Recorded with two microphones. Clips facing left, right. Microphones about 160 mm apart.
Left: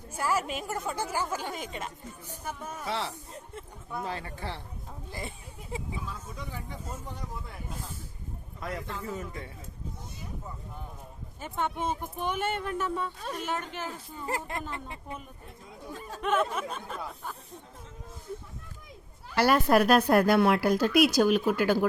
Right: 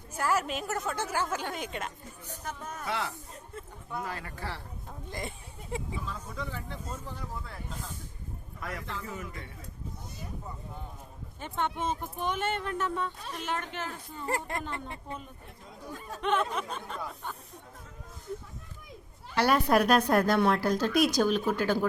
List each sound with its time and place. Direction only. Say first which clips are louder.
0.2 s a woman's voice: even; 10° left (ahead or behind)
2.8 s speech: even; 30° left (ahead or behind)
6.4 s a woman's voice: right 2 dB; 15° left (ahead or behind)
8.6 s a man's voice: left 3 dB; 30° left (ahead or behind)
11.3 s a woman's voice: even; 5° left (ahead or behind)
16.2 s speech: left 1 dB; 5° left (ahead or behind)
19.4 s a woman's voice: left 2 dB; 5° left (ahead or behind)